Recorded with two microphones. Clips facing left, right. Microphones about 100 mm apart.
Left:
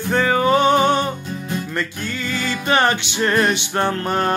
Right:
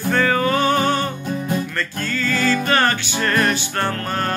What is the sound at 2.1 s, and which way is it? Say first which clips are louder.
Music: right 4 dB; 20° left (ahead or behind).